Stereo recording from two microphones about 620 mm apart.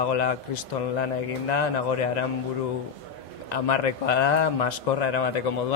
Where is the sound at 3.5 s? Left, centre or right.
Left.